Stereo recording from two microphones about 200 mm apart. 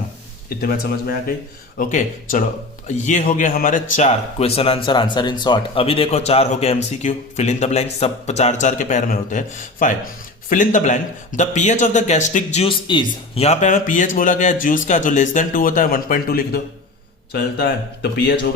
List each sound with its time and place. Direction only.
0.6 s speech: 50° left (ahead or behind)